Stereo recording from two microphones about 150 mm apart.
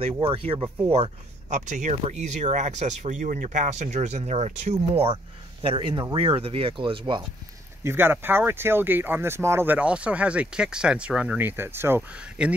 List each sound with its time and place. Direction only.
0.2 s speech: 40° right (ahead or behind)
1.5 s speech: 55° right (ahead or behind)
5.6 s speech: 35° right (ahead or behind)
7.8 s speech: 15° right (ahead or behind)